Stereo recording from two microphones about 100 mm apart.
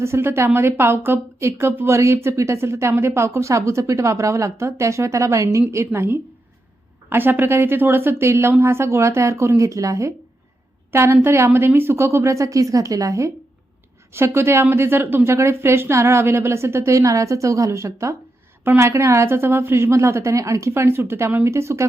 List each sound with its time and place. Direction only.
0.0 s a woman's voice: 25° right (ahead or behind)